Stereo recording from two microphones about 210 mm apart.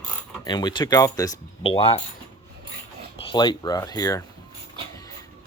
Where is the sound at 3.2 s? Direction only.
20° left (ahead or behind).